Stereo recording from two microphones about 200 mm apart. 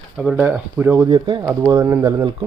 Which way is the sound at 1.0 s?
25° right (ahead or behind).